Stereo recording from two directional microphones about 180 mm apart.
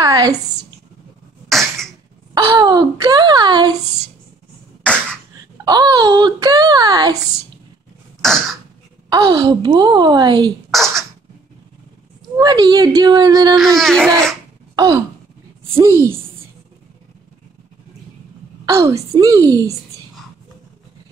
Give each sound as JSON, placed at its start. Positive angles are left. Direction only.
{"t": 0.0, "sound": "a sound", "side_deg": -20}
{"t": 1.5, "sound": "cough", "side_deg": 0}
{"t": 2.3, "sound": "speech", "side_deg": -20}
{"t": 5.7, "sound": "speech", "side_deg": -20}
{"t": 8.2, "sound": "throat clearing", "side_deg": 0}
{"t": 9.1, "sound": "speech", "side_deg": -20}
{"t": 10.7, "sound": "speech", "side_deg": 0}
{"t": 12.4, "sound": "speech", "side_deg": -20}
{"t": 13.6, "sound": "speech", "side_deg": 0}
{"t": 14.8, "sound": "speech", "side_deg": -20}
{"t": 18.7, "sound": "speech", "side_deg": -15}